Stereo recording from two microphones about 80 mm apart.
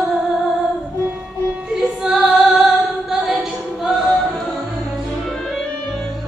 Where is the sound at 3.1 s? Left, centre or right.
Centre.